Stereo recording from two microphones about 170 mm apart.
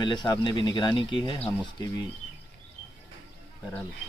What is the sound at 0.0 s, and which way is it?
A man's voice, 25° left (ahead or behind).